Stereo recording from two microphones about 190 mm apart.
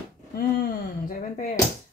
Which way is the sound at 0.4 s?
50° left (ahead or behind).